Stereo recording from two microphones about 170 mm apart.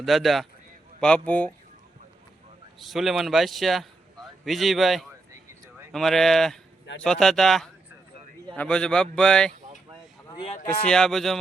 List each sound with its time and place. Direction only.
0.0 s speech: centre (ahead or behind)
2.7 s speech: centre (ahead or behind)
10.2 s a sound: 25° left (ahead or behind)
10.8 s speech: 5° left (ahead or behind)